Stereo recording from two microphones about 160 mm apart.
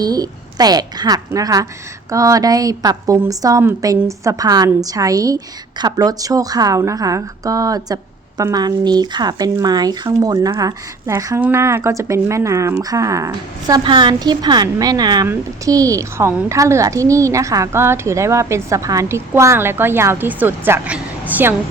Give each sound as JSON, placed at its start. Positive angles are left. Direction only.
{"t": 0.0, "sound": "a woman's voice", "side_deg": -25}